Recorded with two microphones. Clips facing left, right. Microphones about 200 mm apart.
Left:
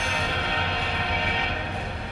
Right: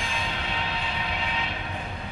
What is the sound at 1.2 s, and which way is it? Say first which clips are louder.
Vehicle: left 3 dB; 65° left (ahead or behind).